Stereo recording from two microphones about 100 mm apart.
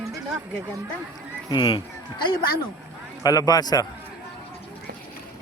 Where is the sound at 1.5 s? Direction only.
50° left (ahead or behind).